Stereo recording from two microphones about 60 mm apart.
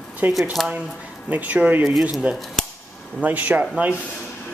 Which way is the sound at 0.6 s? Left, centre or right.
Centre.